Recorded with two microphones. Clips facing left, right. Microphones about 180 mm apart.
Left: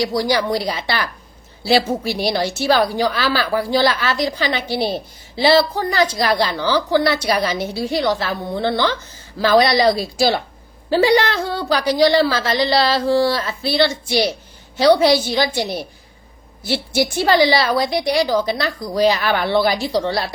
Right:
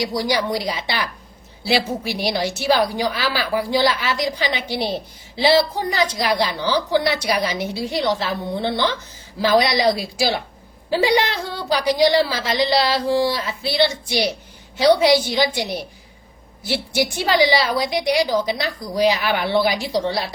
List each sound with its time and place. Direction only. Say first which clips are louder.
0.0 s a woman's voice: left 3 dB; 15° right (ahead or behind)